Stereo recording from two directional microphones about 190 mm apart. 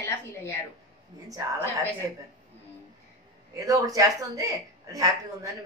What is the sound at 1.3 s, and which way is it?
Speech, 15° right (ahead or behind).